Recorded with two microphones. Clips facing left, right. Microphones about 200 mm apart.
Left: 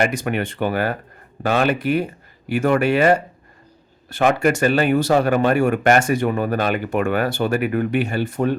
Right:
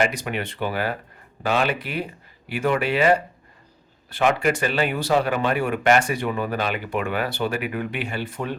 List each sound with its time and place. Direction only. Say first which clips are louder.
0.0 s speech: left 3 dB; 50° left (ahead or behind)